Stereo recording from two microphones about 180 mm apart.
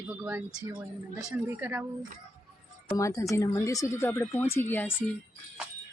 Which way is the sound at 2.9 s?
20° left (ahead or behind).